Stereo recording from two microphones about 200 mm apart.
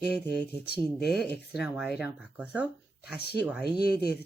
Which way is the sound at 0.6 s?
55° left (ahead or behind).